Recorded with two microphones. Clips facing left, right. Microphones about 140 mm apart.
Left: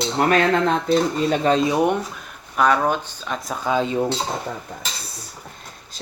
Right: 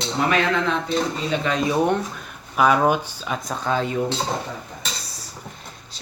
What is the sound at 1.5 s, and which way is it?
Speech, 20° left (ahead or behind).